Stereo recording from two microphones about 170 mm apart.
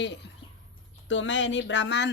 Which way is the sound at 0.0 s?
90° left.